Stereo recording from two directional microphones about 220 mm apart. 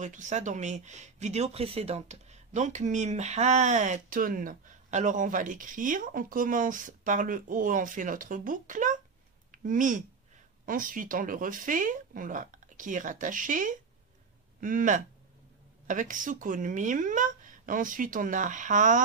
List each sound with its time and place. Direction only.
0.0 s speech: 35° right (ahead or behind)